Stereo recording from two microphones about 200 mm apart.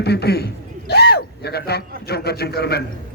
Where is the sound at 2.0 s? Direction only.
50° left (ahead or behind).